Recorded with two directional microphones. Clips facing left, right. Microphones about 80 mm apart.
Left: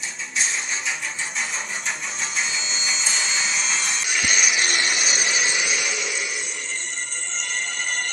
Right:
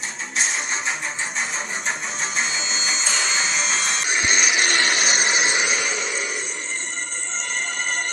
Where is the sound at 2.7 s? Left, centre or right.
Right.